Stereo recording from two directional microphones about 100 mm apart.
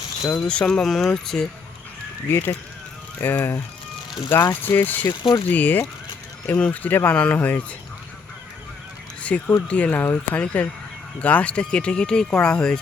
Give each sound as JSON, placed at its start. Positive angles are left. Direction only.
{"t": 0.3, "sound": "speech", "side_deg": 10}
{"t": 2.3, "sound": "speech", "side_deg": 25}
{"t": 4.3, "sound": "speech", "side_deg": 35}
{"t": 4.6, "sound": "speech", "side_deg": 20}
{"t": 9.2, "sound": "speech", "side_deg": 15}